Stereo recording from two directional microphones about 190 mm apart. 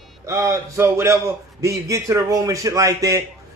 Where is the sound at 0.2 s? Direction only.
15° right (ahead or behind).